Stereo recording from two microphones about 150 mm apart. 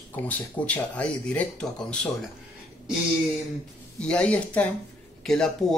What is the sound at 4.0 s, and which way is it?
Speech, 10° left (ahead or behind).